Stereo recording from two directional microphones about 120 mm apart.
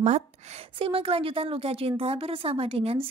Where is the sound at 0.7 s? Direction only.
50° right (ahead or behind).